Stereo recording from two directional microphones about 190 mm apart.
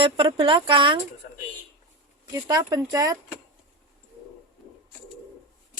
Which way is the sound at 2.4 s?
20° right (ahead or behind).